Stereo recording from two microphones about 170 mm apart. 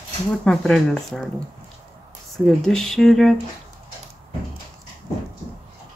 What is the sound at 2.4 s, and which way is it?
Speech, 5° left (ahead or behind).